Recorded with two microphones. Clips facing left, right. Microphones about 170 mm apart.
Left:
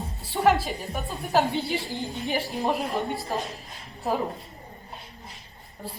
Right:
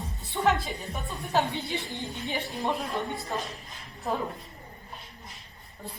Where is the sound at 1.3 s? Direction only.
35° left (ahead or behind).